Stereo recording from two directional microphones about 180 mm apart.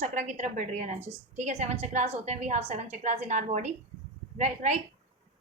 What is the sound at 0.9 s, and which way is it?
Speech, 15° right (ahead or behind).